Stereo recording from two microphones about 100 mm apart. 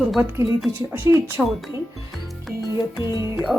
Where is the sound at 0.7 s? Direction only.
25° right (ahead or behind).